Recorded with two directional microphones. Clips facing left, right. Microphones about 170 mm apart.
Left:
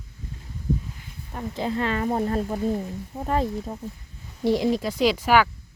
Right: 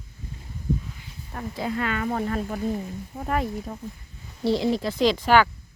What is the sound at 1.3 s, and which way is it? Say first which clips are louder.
Speech: left 2 dB; 25° left (ahead or behind).